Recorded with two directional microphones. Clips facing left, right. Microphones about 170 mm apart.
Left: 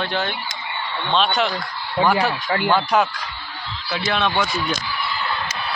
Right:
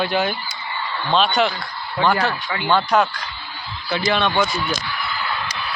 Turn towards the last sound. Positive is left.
turn(degrees=0)  # may be behind; listen again after turning